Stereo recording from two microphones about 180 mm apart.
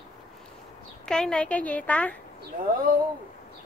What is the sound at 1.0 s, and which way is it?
A woman's voice, 5° left (ahead or behind).